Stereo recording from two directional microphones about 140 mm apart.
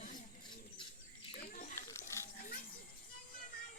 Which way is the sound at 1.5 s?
60° left (ahead or behind).